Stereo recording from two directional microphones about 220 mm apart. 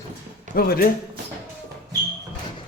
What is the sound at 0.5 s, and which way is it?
Speech, 40° left (ahead or behind).